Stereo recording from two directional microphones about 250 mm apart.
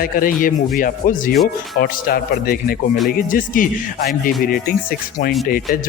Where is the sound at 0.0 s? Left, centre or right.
Left.